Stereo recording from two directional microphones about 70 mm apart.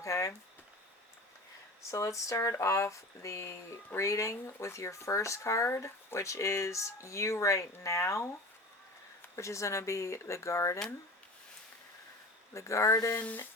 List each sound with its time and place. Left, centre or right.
0.0 s a sound: left
1.9 s speech: left
9.3 s speech: left
12.5 s speech: left
13.2 s speech: left